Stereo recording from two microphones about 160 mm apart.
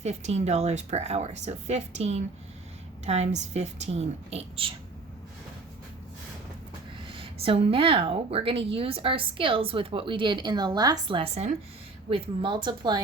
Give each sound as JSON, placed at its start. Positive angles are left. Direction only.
{"t": 0.0, "sound": "a woman's voice", "side_deg": -45}
{"t": 7.1, "sound": "a woman's voice", "side_deg": -35}